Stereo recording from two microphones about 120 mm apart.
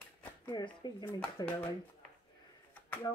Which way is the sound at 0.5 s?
35° left (ahead or behind).